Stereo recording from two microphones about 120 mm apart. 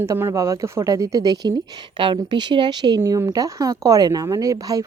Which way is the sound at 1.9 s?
40° right (ahead or behind).